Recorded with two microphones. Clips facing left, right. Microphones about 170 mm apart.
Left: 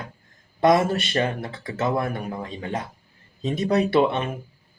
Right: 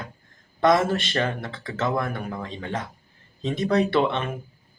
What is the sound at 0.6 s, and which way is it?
Speech, 15° left (ahead or behind).